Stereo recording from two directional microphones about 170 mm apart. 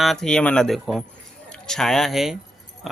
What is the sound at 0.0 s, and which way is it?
Speech, centre (ahead or behind).